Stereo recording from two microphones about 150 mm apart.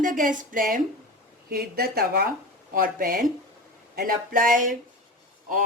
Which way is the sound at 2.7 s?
65° right (ahead or behind).